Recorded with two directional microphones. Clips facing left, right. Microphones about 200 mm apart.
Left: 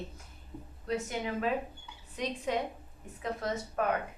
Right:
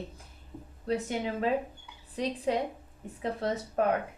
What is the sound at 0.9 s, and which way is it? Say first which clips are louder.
A woman's voice: right 3 dB; 30° right (ahead or behind).